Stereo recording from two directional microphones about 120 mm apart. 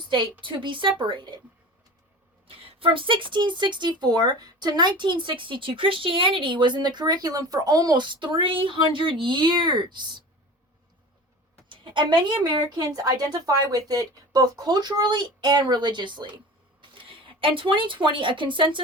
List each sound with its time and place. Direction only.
0.4 s speech: 45° right (ahead or behind)
2.5 s speech: 50° right (ahead or behind)
11.7 s a woman's voice: 40° right (ahead or behind)